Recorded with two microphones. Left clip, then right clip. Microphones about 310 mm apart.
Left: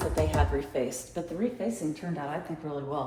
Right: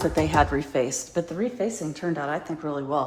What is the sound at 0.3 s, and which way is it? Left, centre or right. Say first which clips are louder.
A woman's voice: right 8 dB; right.